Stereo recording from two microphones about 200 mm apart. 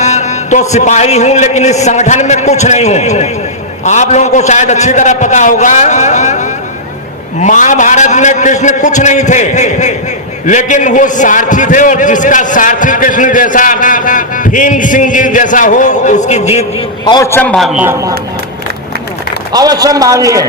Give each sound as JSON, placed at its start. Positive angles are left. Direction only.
{"t": 0.0, "sound": "a sound", "side_deg": 35}
{"t": 0.7, "sound": "a man's voice", "side_deg": 35}
{"t": 17.1, "sound": "a man's voice", "side_deg": 15}
{"t": 17.8, "sound": "a man's voice", "side_deg": -15}
{"t": 19.5, "sound": "a man's voice", "side_deg": -20}